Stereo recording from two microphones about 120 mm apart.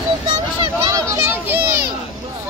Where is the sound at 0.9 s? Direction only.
25° right (ahead or behind).